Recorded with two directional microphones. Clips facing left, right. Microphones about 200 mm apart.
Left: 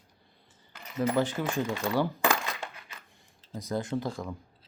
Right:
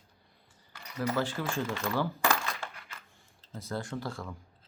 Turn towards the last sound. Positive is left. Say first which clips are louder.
# left 5 dB
turn(degrees=15)  # may be behind; listen again after turning